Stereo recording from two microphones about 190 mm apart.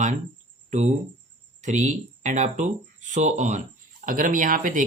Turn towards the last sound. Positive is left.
turn(degrees=-45)  # may be behind; listen again after turning